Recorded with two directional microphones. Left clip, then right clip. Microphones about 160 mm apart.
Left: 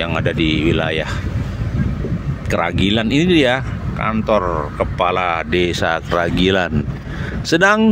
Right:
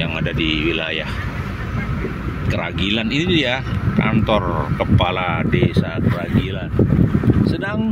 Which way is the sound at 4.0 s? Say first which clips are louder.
Left 2 dB; 10° left (ahead or behind).